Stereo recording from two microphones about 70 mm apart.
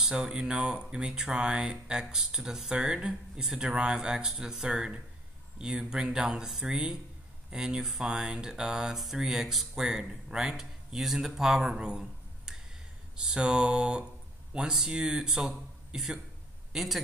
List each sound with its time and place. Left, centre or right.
0.0 s speech: centre